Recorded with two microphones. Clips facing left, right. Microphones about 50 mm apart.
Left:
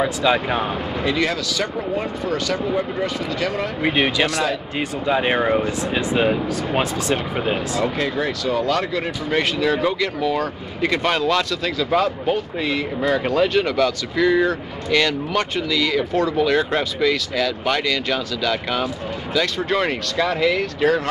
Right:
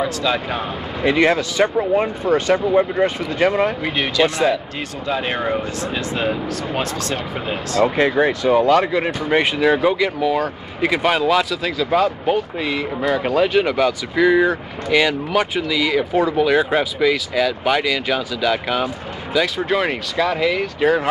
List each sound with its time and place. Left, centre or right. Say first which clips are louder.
0.0 s speech: left 2 dB; centre
1.0 s speech: right 7 dB; right
3.8 s speech: even; centre
7.8 s speech: right 10 dB; right